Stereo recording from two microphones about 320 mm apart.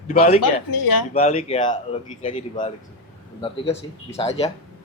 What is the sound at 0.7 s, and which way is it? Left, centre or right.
Speech, left.